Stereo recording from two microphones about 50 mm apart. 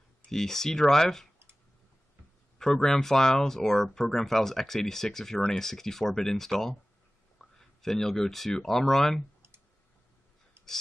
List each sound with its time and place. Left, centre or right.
0.3 s speech: centre
2.6 s speech: centre